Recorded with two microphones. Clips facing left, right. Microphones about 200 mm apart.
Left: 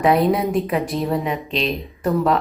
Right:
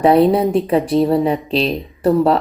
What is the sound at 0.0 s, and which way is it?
Speech, 30° right (ahead or behind).